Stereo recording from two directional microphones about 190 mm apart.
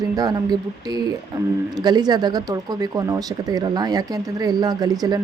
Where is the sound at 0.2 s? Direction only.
20° right (ahead or behind).